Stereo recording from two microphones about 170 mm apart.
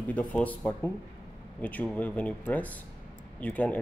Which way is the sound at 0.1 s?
10° left (ahead or behind).